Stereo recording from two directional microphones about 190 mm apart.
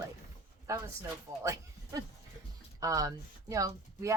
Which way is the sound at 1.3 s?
15° right (ahead or behind).